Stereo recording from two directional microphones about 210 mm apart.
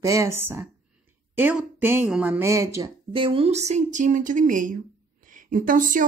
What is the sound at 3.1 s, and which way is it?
A woman's voice, 25° right (ahead or behind).